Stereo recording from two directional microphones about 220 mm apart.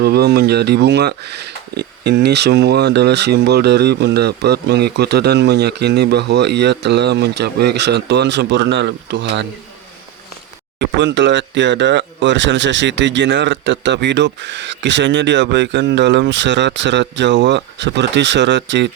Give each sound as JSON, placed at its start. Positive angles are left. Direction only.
{"t": 0.0, "sound": "speech", "side_deg": -45}
{"t": 10.8, "sound": "speech", "side_deg": -55}